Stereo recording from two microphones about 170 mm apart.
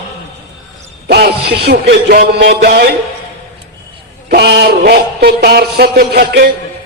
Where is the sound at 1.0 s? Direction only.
70° right (ahead or behind).